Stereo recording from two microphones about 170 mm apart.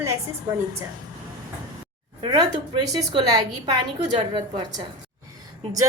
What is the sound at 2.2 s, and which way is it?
A woman's voice, 30° right (ahead or behind).